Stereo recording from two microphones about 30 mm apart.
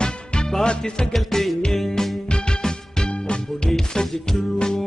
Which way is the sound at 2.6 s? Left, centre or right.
Left.